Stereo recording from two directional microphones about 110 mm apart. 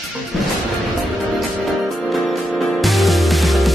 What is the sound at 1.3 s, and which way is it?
Music, centre (ahead or behind).